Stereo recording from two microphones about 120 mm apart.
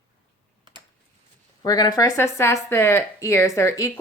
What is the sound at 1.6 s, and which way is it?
Speech, 35° left (ahead or behind).